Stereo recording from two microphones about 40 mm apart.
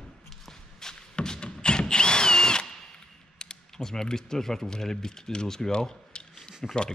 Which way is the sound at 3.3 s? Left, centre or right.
Centre.